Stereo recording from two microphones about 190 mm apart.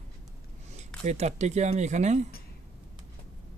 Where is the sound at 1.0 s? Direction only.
35° right (ahead or behind).